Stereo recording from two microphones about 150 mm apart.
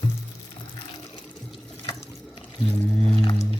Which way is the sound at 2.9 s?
5° left (ahead or behind).